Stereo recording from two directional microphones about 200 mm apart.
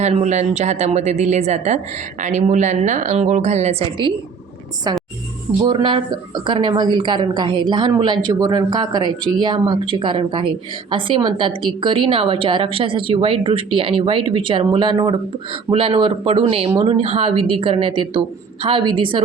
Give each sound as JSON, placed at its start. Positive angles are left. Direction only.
{"t": 0.0, "sound": "a woman's voice", "side_deg": -35}
{"t": 5.6, "sound": "a woman's voice", "side_deg": -25}